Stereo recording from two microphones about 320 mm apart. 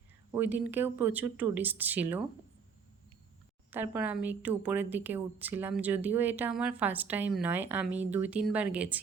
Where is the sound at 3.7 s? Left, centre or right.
Centre.